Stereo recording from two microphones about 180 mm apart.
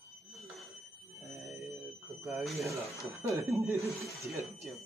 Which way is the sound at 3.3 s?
15° right (ahead or behind).